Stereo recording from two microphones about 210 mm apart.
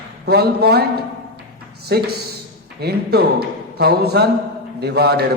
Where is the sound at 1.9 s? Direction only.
50° right (ahead or behind).